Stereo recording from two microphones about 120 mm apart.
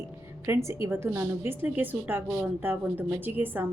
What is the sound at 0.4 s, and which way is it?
A woman's voice, 20° right (ahead or behind).